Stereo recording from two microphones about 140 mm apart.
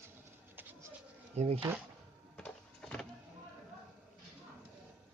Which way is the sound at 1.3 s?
50° right (ahead or behind).